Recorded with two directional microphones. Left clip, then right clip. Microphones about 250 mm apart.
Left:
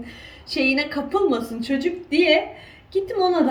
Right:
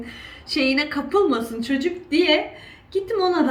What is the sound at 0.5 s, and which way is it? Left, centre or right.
A woman's voice, centre.